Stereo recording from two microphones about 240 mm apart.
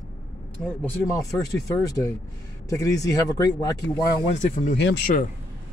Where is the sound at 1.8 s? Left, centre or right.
Centre.